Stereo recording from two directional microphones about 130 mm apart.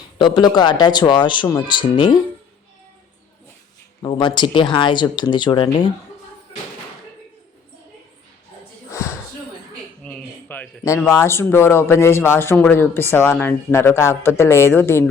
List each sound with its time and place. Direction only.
0.2 s speech: 40° left (ahead or behind)
4.0 s speech: 35° left (ahead or behind)
8.9 s a sound: 20° left (ahead or behind)
10.8 s a man's voice: 20° left (ahead or behind)